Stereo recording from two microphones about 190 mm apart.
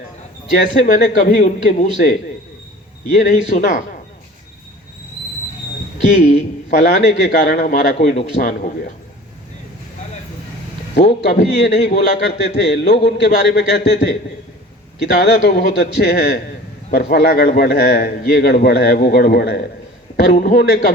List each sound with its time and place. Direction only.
0.5 s a man's voice: 40° left (ahead or behind)
0.9 s a man's voice: 60° left (ahead or behind)
1.2 s a man's voice: 45° left (ahead or behind)
3.1 s a man's voice: 60° left (ahead or behind)
6.9 s a man's voice: 65° left (ahead or behind)
7.4 s a man's voice: 45° left (ahead or behind)
8.0 s a man's voice: 55° left (ahead or behind)
11.0 s a man's voice: 65° left (ahead or behind)
15.0 s a man's voice: 60° left (ahead or behind)